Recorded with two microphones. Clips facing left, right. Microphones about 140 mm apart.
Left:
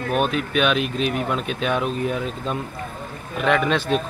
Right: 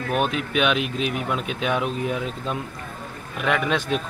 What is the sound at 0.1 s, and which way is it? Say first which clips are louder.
Speech: left 2 dB; 15° right (ahead or behind).